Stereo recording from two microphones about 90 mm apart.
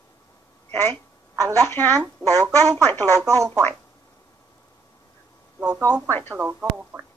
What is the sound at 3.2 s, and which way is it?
Speech, 35° right (ahead or behind).